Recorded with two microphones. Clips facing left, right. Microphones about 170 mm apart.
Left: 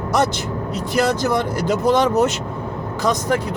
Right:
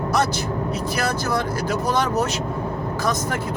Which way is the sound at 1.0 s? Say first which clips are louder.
Left 7 dB; 20° left (ahead or behind).